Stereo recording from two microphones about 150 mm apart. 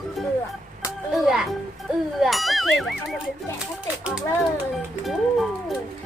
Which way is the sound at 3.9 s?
5° right (ahead or behind).